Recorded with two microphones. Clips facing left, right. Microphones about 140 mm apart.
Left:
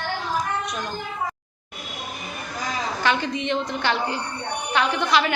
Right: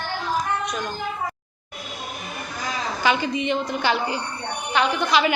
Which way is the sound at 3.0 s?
5° right (ahead or behind).